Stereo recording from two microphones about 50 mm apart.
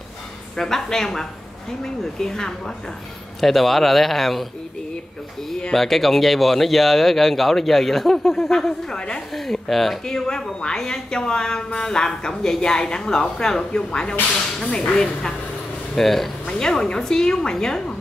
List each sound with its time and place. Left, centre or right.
0.6 s a woman's voice: centre
5.8 s speech: centre
9.3 s a woman's voice: centre
15.9 s a woman's voice: centre